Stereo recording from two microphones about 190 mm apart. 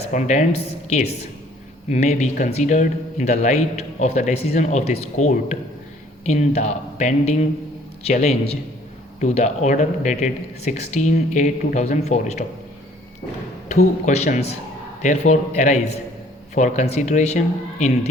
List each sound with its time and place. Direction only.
0.1 s a man's voice: 40° left (ahead or behind)
13.7 s a man's voice: 35° left (ahead or behind)